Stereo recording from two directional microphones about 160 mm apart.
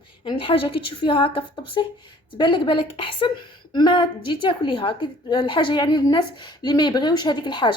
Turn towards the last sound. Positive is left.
turn(degrees=30)  # may be behind; listen again after turning